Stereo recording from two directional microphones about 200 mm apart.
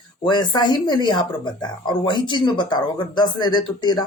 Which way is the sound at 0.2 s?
20° left (ahead or behind).